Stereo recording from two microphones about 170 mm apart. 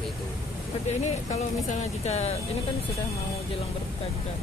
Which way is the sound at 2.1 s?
40° left (ahead or behind).